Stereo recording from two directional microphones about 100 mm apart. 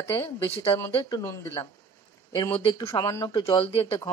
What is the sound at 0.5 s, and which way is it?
Speech, 75° left (ahead or behind).